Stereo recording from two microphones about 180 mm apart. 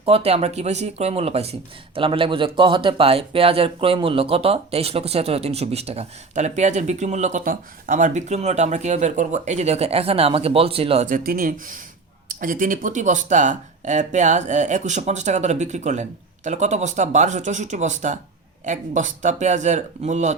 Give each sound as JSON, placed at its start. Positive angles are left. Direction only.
{"t": 0.0, "sound": "speech", "side_deg": -35}